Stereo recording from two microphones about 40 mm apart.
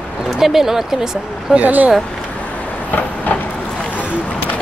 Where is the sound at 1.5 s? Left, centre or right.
Right.